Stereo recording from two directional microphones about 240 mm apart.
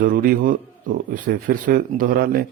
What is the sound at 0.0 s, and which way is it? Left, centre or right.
Speech, right.